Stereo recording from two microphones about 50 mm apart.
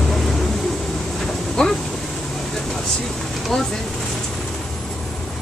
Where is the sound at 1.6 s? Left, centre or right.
Centre.